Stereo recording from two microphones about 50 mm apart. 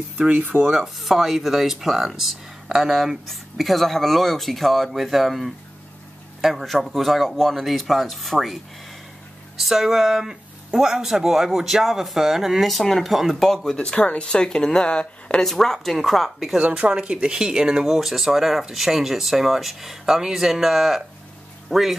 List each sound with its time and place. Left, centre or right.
0.3 s speech: right
0.7 s speech: centre
9.6 s speech: centre
13.7 s speech: left
14.2 s speech: centre
15.4 s speech: centre
16.6 s speech: right; by 21.9 s centre